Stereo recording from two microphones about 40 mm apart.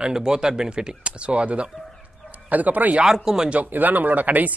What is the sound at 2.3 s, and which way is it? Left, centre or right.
Bow-wow, right.